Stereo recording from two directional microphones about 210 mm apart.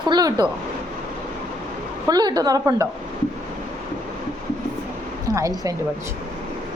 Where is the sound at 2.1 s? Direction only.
20° right (ahead or behind).